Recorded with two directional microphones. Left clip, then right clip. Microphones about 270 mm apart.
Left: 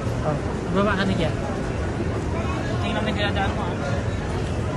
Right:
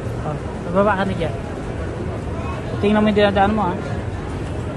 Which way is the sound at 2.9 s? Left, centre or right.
Centre.